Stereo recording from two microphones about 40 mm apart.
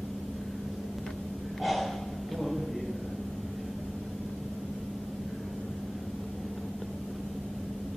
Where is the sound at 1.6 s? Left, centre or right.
Centre.